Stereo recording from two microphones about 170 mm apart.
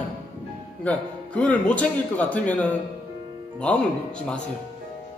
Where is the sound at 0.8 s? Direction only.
10° left (ahead or behind).